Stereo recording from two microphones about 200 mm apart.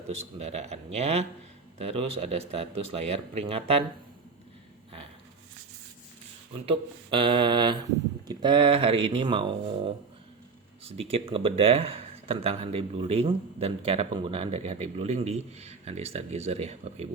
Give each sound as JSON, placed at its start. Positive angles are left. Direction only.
{"t": 0.1, "sound": "a man's voice", "side_deg": -30}
{"t": 7.1, "sound": "speech", "side_deg": -25}
{"t": 10.8, "sound": "speech", "side_deg": -30}